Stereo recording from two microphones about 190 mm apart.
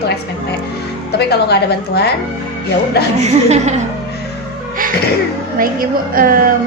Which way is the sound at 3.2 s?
35° right (ahead or behind).